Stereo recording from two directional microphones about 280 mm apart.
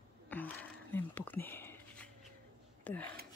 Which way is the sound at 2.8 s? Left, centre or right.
Centre.